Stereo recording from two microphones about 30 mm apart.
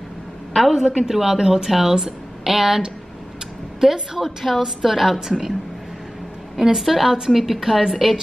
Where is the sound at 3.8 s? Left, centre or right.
Centre.